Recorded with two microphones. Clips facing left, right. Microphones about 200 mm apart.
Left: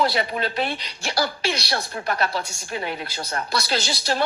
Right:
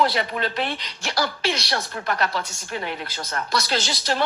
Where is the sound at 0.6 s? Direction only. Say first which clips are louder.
Left 1 dB; 10° left (ahead or behind).